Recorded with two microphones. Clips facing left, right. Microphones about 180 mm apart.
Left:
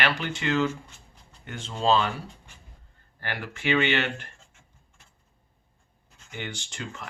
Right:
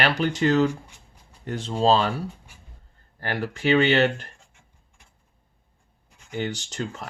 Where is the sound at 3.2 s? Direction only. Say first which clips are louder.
Right 6 dB; 40° right (ahead or behind).